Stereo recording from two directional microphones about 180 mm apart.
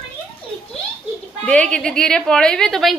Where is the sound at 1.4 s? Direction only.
5° left (ahead or behind).